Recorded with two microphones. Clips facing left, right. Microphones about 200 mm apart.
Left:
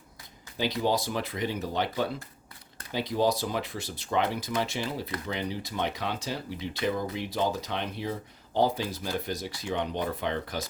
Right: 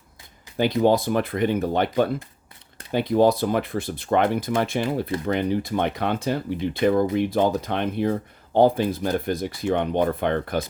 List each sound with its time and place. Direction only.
0.5 s speech: 55° right (ahead or behind)